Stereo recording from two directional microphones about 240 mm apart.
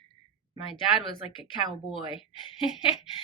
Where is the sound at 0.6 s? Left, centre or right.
Centre.